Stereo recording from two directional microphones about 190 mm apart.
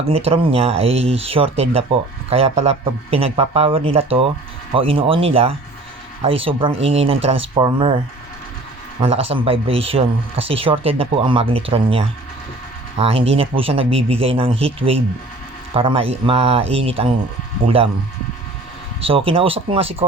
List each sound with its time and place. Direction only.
0.1 s speech: 30° right (ahead or behind)
9.0 s speech: 30° right (ahead or behind)
19.0 s speech: 30° right (ahead or behind)